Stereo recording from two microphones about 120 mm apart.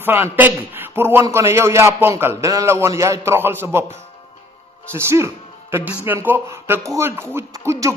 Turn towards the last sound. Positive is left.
turn(degrees=-25)  # may be behind; listen again after turning